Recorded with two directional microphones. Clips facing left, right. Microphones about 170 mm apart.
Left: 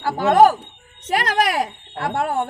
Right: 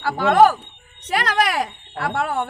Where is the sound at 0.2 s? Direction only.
40° left (ahead or behind).